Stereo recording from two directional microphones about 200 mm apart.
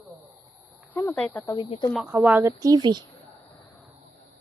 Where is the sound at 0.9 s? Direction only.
10° left (ahead or behind).